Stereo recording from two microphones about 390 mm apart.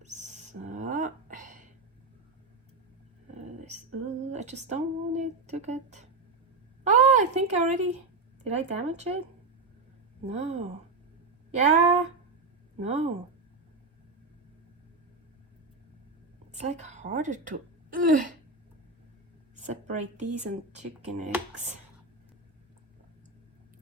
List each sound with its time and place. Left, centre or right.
0.0 s a sound: centre
3.3 s speech: centre
6.8 s a sound: centre
8.4 s speech: centre
10.2 s speech: centre
16.5 s a woman's voice: centre
19.5 s speech: centre